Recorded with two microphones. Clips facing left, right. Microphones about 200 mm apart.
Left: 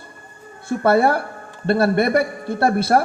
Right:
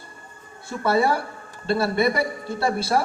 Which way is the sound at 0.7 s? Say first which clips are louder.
Left 5 dB; 55° left (ahead or behind).